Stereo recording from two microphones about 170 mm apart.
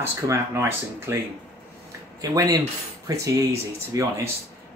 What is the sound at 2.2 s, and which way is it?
Speech, 20° right (ahead or behind).